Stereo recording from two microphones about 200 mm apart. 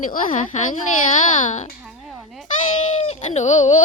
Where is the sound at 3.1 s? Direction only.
35° left (ahead or behind).